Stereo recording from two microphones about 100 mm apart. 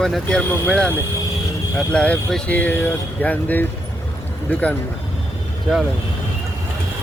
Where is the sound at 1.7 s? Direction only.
10° left (ahead or behind).